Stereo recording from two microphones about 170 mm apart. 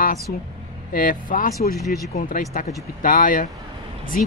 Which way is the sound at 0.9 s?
55° left (ahead or behind).